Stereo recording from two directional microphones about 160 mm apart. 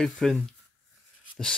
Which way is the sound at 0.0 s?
Centre (ahead or behind).